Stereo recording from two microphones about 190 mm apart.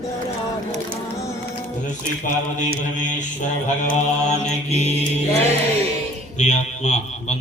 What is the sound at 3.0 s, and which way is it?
A man's voice, 40° left (ahead or behind).